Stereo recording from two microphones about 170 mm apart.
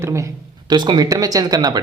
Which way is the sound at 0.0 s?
15° right (ahead or behind).